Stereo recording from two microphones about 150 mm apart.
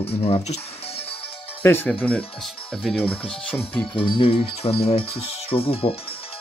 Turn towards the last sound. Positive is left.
turn(degrees=40)  # may be behind; listen again after turning